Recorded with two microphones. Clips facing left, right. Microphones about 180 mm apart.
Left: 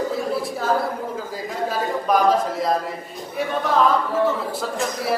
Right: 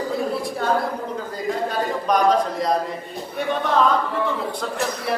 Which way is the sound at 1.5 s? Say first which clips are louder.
Right 1 dB; 5° left (ahead or behind).